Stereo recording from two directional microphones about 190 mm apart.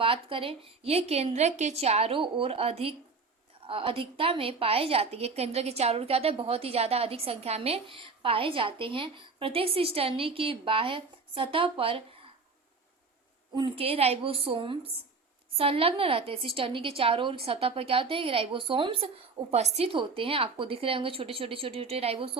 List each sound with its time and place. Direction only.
0.0 s a woman's voice: 30° right (ahead or behind)
13.5 s a woman's voice: 25° right (ahead or behind)